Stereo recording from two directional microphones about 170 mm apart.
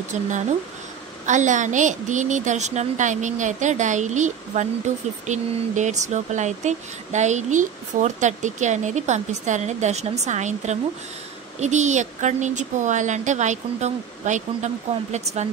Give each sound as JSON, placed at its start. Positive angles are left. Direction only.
{"t": 1.2, "sound": "a woman's voice", "side_deg": -45}